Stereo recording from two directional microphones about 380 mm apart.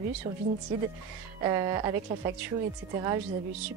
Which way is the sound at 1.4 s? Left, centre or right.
Centre.